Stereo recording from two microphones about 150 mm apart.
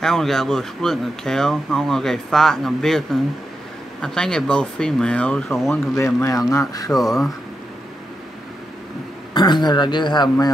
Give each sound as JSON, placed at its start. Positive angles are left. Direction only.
{"t": 0.0, "sound": "speech", "side_deg": 5}
{"t": 5.9, "sound": "speech", "side_deg": 20}
{"t": 9.3, "sound": "a man's voice", "side_deg": 30}